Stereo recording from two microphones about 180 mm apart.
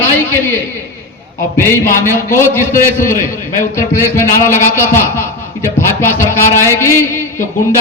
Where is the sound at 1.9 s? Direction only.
15° left (ahead or behind).